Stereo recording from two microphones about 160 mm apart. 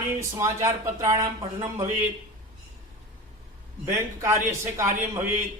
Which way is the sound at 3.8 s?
15° right (ahead or behind).